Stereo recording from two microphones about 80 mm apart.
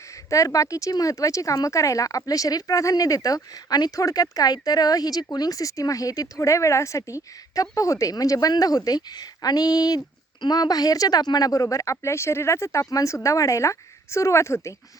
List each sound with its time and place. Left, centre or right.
0.3 s speech: left